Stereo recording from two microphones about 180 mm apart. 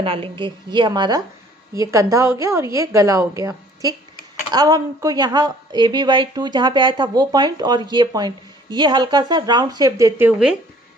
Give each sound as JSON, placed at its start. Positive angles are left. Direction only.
{"t": 0.0, "sound": "a woman's voice", "side_deg": -30}